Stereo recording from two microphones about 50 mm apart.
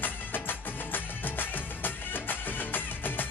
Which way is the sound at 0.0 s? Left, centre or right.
Left.